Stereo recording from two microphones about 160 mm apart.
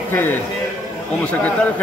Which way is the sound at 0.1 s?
15° left (ahead or behind).